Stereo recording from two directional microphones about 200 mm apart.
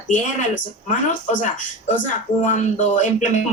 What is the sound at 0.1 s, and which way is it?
Speech, 40° left (ahead or behind).